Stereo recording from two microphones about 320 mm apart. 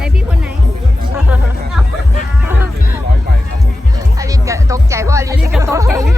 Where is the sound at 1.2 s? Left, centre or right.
Centre.